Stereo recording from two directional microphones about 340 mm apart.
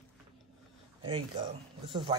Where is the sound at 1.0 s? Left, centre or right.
Centre.